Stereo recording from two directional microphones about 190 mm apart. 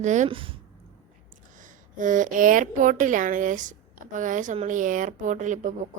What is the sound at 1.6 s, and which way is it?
A woman's voice, 45° right (ahead or behind).